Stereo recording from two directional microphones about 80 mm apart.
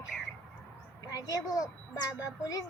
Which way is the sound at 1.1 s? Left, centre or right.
Left.